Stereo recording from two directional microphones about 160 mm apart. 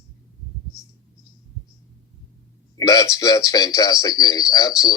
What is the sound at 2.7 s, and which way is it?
Speech, 20° left (ahead or behind).